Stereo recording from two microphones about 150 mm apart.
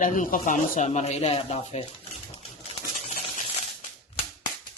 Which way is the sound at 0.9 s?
45° left (ahead or behind).